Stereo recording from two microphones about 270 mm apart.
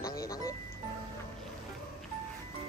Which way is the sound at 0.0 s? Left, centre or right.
Centre.